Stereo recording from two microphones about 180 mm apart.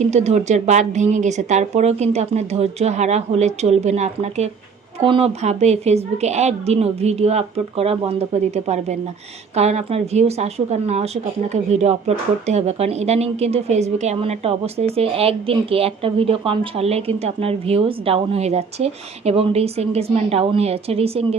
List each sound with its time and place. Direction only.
0.0 s a woman's voice: 40° right (ahead or behind)